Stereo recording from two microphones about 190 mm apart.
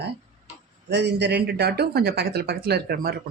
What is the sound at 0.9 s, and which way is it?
Speech, 65° right (ahead or behind).